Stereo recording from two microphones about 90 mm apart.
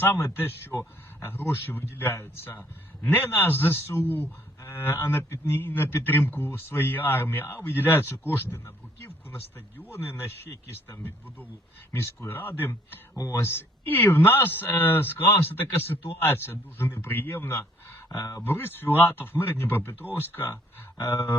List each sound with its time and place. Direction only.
0.0 s a man's voice: 25° left (ahead or behind)
0.7 s speech: 35° left (ahead or behind)
1.3 s a man's voice: 25° left (ahead or behind)
18.1 s speech: 40° left (ahead or behind)
18.4 s a man's voice: 25° left (ahead or behind)